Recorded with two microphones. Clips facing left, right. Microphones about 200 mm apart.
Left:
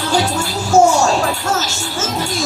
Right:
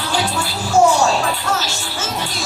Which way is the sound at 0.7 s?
25° left (ahead or behind).